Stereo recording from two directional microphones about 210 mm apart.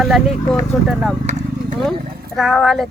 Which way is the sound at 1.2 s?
35° right (ahead or behind).